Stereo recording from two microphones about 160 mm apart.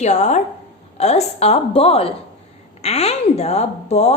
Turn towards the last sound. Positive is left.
turn(degrees=40)  # may be behind; listen again after turning